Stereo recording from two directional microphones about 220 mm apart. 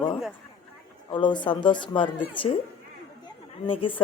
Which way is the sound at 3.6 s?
25° left (ahead or behind).